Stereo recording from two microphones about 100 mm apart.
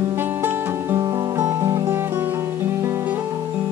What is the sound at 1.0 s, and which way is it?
Music, 40° right (ahead or behind).